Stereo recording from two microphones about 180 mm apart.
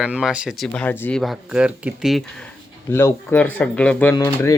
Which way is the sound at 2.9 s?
15° left (ahead or behind).